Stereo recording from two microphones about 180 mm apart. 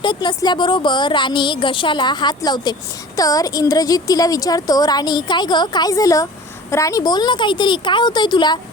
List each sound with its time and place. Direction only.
0.0 s a woman's voice: 25° left (ahead or behind)